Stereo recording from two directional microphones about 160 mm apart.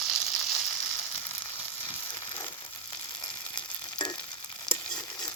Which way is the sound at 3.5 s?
30° left (ahead or behind).